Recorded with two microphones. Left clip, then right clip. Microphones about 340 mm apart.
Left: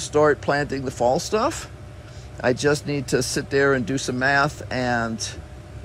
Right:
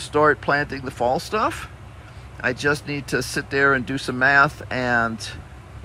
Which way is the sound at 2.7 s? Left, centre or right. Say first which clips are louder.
Left 1 dB; centre.